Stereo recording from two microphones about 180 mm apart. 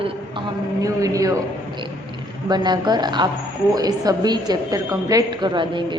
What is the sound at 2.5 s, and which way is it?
A woman's voice, 25° right (ahead or behind).